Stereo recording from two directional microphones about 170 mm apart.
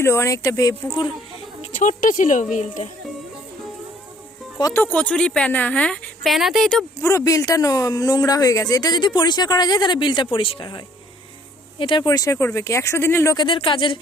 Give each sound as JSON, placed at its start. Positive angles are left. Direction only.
{"t": 0.0, "sound": "speech", "side_deg": 15}
{"t": 1.8, "sound": "speech", "side_deg": 50}
{"t": 4.6, "sound": "a woman's voice", "side_deg": 10}
{"t": 7.0, "sound": "speech", "side_deg": 20}
{"t": 13.3, "sound": "speech", "side_deg": 30}